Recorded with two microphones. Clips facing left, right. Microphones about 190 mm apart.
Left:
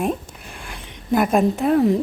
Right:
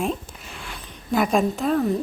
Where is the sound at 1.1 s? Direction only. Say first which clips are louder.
Left 3 dB; 5° left (ahead or behind).